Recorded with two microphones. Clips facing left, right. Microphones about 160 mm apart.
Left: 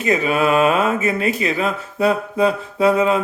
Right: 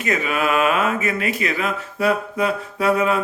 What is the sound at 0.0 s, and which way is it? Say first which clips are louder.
Speech: left 4 dB; 30° left (ahead or behind).